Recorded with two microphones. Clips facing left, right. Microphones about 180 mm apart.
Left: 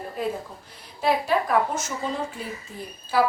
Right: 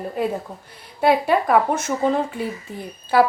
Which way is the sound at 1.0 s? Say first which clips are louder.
Right 5 dB; 60° right (ahead or behind).